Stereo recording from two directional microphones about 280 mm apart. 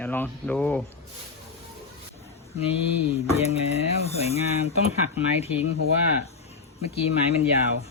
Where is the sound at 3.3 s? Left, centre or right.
Left.